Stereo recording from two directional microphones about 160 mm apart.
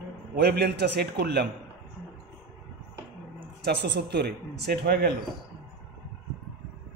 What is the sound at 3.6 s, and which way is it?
A man's voice, 90° right.